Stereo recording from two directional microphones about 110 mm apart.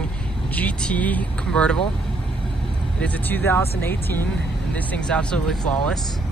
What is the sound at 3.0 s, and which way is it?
Speech, 15° left (ahead or behind).